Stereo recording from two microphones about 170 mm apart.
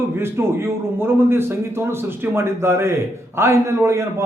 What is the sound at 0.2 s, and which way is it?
A man's voice, 15° right (ahead or behind).